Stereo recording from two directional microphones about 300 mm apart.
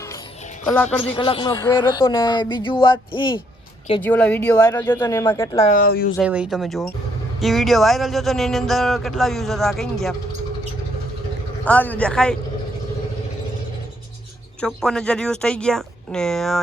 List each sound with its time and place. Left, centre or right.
1.0 s speech: centre
4.0 s speech: centre
5.6 s speech: left
6.1 s speech: centre
11.6 s speech: centre
14.6 s speech: centre